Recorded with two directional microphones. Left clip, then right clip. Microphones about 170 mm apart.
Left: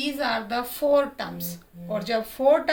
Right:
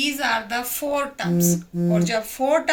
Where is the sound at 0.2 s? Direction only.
50° left (ahead or behind).